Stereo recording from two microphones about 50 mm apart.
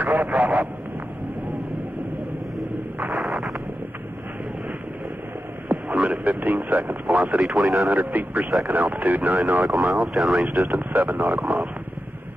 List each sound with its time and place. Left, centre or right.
0.0 s vehicle: right
5.9 s speech: right
7.4 s speech: centre
7.9 s speech: right
9.8 s speech: centre
10.7 s a man's voice: right